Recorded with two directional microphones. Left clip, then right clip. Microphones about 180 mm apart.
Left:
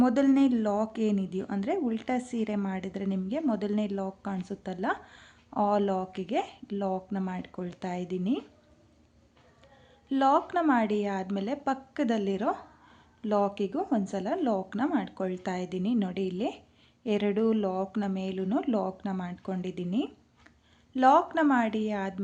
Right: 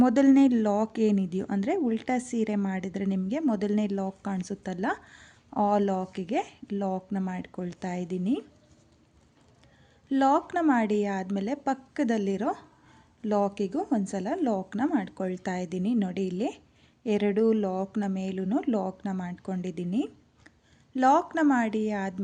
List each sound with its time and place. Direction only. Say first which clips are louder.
0.0 s speech: right 3 dB; 35° right (ahead or behind)
10.1 s speech: right 1 dB; 30° right (ahead or behind)